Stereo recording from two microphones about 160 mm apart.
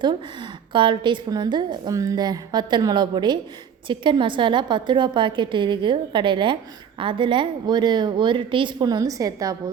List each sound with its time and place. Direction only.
0.0 s a woman's voice: 30° right (ahead or behind)